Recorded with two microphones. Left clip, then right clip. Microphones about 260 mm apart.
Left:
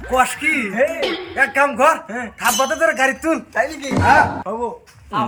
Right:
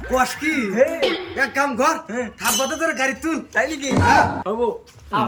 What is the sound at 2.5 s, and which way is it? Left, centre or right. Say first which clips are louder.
Speech: left 4 dB; centre.